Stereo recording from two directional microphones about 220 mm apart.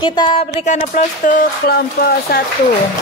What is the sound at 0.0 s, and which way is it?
Speech, 20° left (ahead or behind).